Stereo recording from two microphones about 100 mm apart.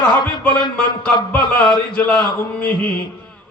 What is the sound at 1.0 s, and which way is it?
A man's voice, 15° left (ahead or behind).